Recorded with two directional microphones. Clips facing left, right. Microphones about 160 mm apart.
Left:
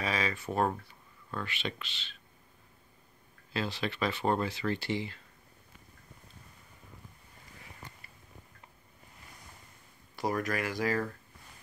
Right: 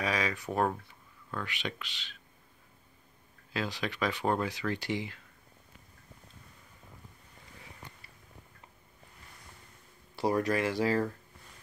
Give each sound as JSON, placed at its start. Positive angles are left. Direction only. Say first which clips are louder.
{"t": 0.0, "sound": "speech", "louder": "right 1 dB", "side_deg": -15}
{"t": 0.3, "sound": "speech", "louder": "even", "side_deg": 0}
{"t": 1.4, "sound": "speech", "louder": "even", "side_deg": -10}
{"t": 3.5, "sound": "speech", "louder": "even", "side_deg": -15}
{"t": 10.1, "sound": "speech", "louder": "right 4 dB", "side_deg": -30}